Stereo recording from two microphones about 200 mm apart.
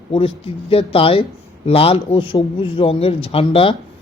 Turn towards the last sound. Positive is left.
turn(degrees=30)  # may be behind; listen again after turning